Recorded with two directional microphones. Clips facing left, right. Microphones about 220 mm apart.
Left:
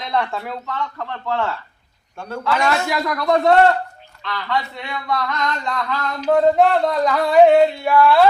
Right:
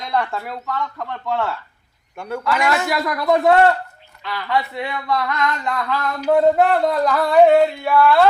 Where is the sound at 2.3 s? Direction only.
15° right (ahead or behind).